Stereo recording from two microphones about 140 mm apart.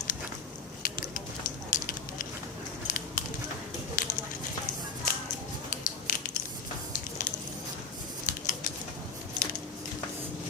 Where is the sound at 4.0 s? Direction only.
70° left (ahead or behind).